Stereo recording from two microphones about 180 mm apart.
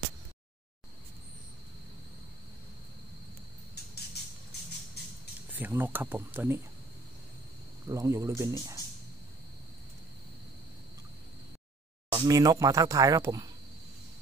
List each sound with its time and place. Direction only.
5.5 s speech: 10° right (ahead or behind)
7.9 s speech: 15° right (ahead or behind)
12.1 s speech: 20° right (ahead or behind)